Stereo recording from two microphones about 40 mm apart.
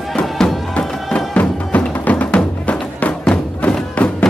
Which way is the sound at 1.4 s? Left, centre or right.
Left.